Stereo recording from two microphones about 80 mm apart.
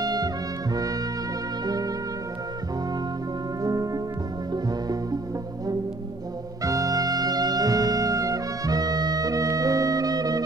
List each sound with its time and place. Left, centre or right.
0.0 s music: right
3.6 s music: right
6.6 s music: right